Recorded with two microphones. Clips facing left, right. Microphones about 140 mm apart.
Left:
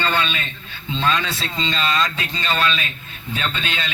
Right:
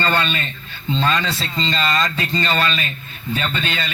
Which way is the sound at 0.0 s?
45° right (ahead or behind).